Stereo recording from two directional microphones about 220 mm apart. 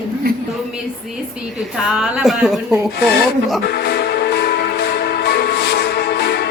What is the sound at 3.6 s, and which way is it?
Music, 45° left (ahead or behind).